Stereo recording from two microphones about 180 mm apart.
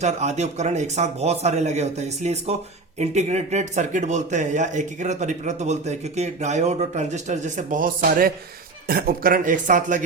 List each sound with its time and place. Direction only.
0.0 s a man's voice: 40° right (ahead or behind)